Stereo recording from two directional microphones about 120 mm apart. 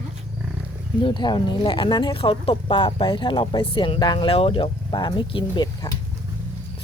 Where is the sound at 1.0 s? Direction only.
40° left (ahead or behind).